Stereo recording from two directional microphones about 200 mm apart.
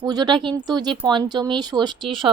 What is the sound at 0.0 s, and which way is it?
A woman's voice, 20° right (ahead or behind).